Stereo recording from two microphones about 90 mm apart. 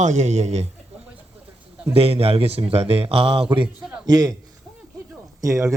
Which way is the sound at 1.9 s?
90° right.